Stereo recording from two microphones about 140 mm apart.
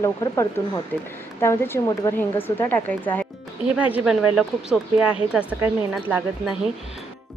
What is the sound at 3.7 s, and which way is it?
Speech, 10° right (ahead or behind).